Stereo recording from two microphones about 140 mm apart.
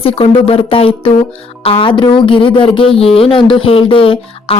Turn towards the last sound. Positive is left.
turn(degrees=40)  # may be behind; listen again after turning